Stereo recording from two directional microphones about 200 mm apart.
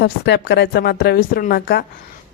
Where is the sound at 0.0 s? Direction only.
55° left (ahead or behind).